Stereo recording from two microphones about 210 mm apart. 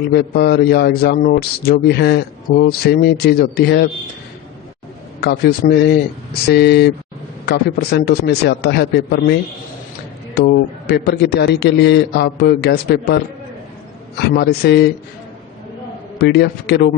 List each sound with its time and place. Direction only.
0.1 s a man's voice: 50° left (ahead or behind)
5.2 s a man's voice: 50° left (ahead or behind)
16.2 s a man's voice: 50° left (ahead or behind)